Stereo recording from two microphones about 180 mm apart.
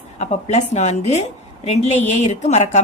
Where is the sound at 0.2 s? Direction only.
40° left (ahead or behind).